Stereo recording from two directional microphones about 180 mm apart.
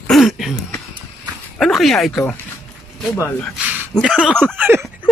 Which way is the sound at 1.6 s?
Centre (ahead or behind).